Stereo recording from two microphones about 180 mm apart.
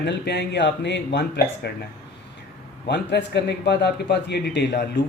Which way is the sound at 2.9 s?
70° left (ahead or behind).